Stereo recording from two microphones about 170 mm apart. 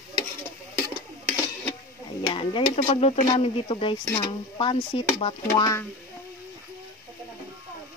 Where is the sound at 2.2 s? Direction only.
30° left (ahead or behind).